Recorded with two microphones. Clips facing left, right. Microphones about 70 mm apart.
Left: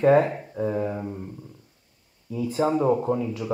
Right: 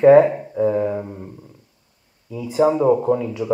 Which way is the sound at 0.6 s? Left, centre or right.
Right.